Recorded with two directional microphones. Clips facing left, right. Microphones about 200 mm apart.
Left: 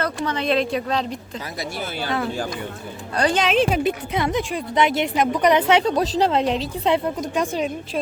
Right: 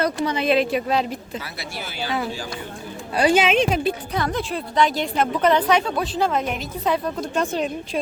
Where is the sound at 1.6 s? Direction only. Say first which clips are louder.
Left 3 dB; 50° left (ahead or behind).